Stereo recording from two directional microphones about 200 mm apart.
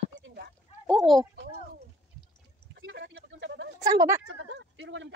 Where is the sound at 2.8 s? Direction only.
60° right (ahead or behind).